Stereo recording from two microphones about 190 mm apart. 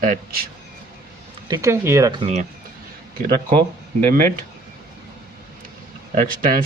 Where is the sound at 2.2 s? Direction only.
35° right (ahead or behind).